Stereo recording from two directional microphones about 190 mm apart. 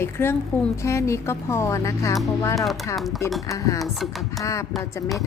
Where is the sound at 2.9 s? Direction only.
Centre (ahead or behind).